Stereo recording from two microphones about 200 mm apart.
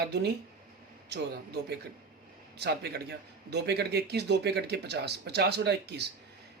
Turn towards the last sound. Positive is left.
turn(degrees=-55)  # may be behind; listen again after turning